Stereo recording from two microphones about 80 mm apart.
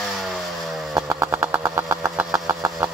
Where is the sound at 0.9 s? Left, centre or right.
Right.